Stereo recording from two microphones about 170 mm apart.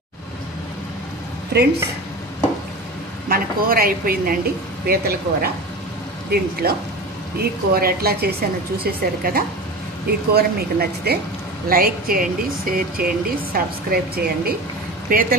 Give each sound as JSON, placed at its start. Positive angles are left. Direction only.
{"t": 1.5, "sound": "speech", "side_deg": -70}
{"t": 3.3, "sound": "speech", "side_deg": -60}
{"t": 6.6, "sound": "speech", "side_deg": -65}